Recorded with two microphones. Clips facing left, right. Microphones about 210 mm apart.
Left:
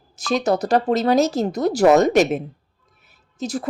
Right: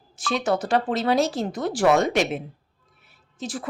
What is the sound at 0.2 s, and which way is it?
Speech, 40° left (ahead or behind).